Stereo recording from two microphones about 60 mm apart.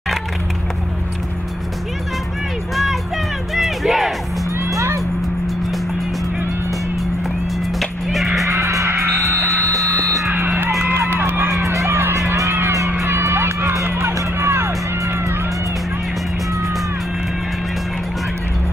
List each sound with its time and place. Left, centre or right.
2.7 s music: centre
4.7 s music: right
7.8 s music: centre
8.5 s music: right
9.3 s music: right